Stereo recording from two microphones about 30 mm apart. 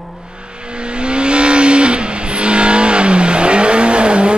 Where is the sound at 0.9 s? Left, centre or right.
Right.